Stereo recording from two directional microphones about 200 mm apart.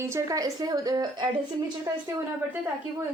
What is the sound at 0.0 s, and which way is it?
A woman's voice, 15° right (ahead or behind).